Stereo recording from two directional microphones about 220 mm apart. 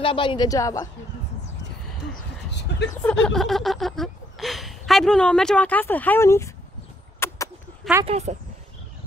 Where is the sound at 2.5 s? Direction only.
50° left (ahead or behind).